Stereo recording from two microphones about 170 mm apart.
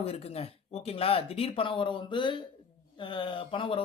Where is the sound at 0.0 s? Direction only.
35° left (ahead or behind).